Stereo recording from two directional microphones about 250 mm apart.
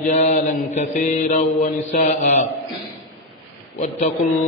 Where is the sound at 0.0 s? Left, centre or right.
Left.